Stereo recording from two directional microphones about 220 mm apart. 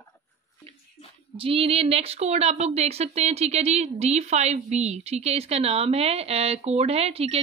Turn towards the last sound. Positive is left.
turn(degrees=-25)  # may be behind; listen again after turning